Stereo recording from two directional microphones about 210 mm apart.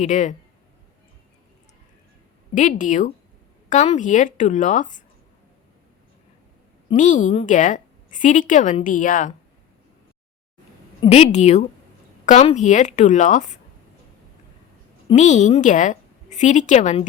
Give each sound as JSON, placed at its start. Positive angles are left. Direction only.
{"t": 0.0, "sound": "a woman's voice", "side_deg": 35}
{"t": 2.6, "sound": "a woman's voice", "side_deg": 35}
{"t": 6.9, "sound": "a woman's voice", "side_deg": 35}
{"t": 11.0, "sound": "a woman's voice", "side_deg": 30}
{"t": 15.1, "sound": "a woman's voice", "side_deg": 35}